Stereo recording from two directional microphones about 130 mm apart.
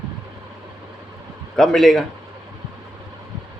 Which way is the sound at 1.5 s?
5° left (ahead or behind).